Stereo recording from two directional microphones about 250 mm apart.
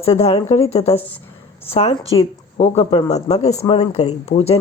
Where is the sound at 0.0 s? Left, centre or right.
Left.